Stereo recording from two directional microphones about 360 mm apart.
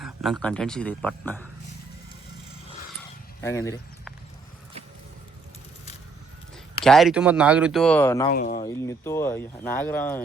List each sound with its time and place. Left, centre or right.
0.0 s a sound: centre
0.4 s speech: centre
3.4 s speech: centre
6.8 s speech: centre
8.3 s speech: left
8.6 s speech: centre